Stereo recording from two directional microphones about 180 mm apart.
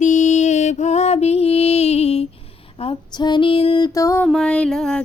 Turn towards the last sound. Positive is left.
turn(degrees=5)  # may be behind; listen again after turning